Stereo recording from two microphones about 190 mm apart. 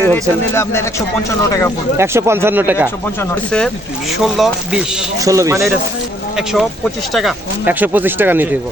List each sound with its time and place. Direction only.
0.0 s speech: 10° left (ahead or behind)
2.0 s speech: 15° right (ahead or behind)
3.2 s speech: 5° left (ahead or behind)
5.2 s speech: 15° right (ahead or behind)
6.3 s speech: 5° right (ahead or behind)